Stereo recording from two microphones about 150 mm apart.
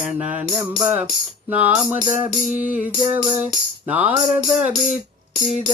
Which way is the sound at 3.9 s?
10° right (ahead or behind).